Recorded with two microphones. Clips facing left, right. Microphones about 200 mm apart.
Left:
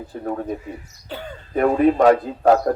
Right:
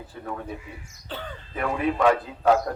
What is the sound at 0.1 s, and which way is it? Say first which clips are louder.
Speech: left 9 dB; 45° left (ahead or behind).